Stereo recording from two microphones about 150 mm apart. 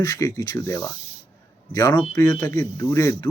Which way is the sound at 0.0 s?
20° left (ahead or behind).